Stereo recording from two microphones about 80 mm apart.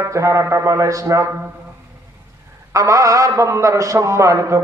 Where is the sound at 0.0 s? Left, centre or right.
Right.